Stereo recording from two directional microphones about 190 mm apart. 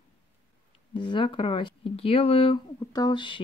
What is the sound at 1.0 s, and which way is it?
Speech, 25° left (ahead or behind).